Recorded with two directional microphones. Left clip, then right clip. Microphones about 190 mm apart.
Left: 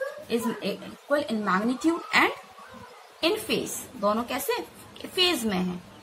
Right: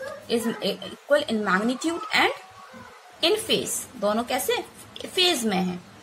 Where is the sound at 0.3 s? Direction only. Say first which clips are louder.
Right 5 dB; 35° right (ahead or behind).